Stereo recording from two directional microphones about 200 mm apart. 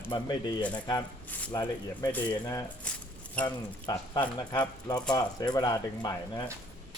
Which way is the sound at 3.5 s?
20° left (ahead or behind).